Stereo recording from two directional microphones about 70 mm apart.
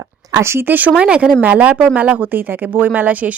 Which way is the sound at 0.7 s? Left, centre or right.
Centre.